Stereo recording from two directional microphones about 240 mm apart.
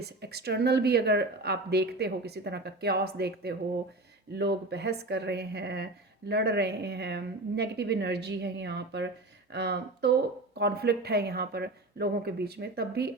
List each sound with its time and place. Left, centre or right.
0.0 s a woman's voice: right